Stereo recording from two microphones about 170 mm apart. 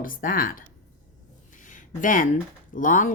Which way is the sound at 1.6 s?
50° left (ahead or behind).